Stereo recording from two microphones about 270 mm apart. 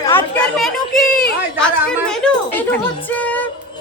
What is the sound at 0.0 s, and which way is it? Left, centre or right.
Chatter, centre.